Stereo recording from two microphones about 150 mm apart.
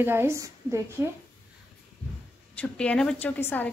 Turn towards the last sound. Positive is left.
turn(degrees=15)  # may be behind; listen again after turning